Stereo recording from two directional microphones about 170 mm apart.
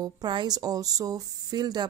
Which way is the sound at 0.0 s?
25° right (ahead or behind).